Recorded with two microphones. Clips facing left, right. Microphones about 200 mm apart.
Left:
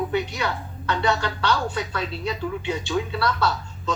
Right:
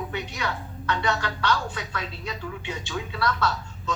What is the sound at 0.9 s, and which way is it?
Speech, 30° left (ahead or behind).